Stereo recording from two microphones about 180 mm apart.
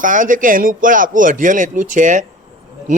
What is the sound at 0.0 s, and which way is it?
A man's voice, 45° right (ahead or behind).